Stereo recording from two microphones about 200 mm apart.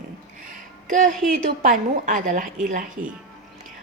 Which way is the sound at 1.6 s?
40° right (ahead or behind).